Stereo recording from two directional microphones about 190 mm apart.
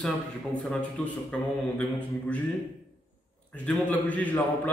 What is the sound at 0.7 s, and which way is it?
A man's voice, 5° left (ahead or behind).